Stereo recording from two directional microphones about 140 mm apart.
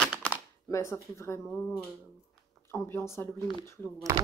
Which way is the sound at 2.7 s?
20° left (ahead or behind).